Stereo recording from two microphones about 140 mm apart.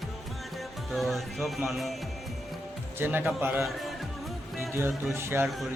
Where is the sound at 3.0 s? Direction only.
15° right (ahead or behind).